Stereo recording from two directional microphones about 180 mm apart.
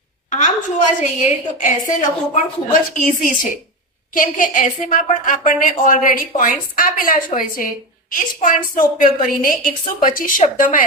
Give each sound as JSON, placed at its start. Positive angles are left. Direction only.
{"t": 0.3, "sound": "a woman's voice", "side_deg": 45}